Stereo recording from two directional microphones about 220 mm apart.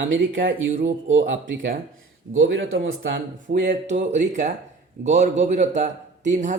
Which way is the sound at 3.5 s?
35° right (ahead or behind).